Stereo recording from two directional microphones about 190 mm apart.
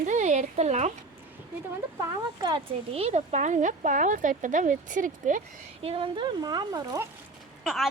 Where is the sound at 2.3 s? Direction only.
25° right (ahead or behind); by 5.4 s 45° right (ahead or behind).